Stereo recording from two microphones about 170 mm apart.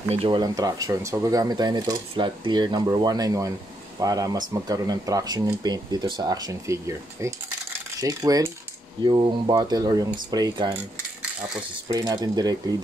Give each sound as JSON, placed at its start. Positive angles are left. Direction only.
{"t": 0.1, "sound": "speech", "side_deg": -35}
{"t": 0.4, "sound": "speech", "side_deg": -20}
{"t": 11.9, "sound": "speech", "side_deg": -25}